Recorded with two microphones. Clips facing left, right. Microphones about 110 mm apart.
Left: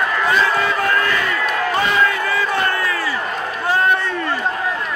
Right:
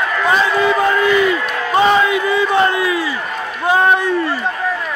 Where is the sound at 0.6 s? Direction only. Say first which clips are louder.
Right 5 dB; 20° right (ahead or behind).